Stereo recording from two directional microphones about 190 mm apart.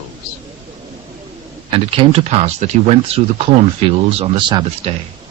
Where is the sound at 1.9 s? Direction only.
30° right (ahead or behind).